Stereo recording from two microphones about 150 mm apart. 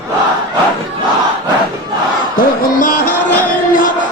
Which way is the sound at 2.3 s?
65° left (ahead or behind).